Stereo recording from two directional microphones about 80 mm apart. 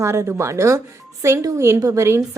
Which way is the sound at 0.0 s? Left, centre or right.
Right.